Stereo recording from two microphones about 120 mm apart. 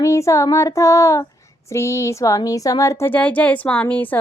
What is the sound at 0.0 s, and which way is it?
Child singing, 25° left (ahead or behind).